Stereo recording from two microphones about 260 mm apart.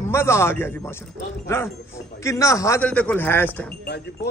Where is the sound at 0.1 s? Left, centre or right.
Centre.